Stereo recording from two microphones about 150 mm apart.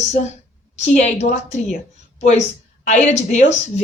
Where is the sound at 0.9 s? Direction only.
50° left (ahead or behind).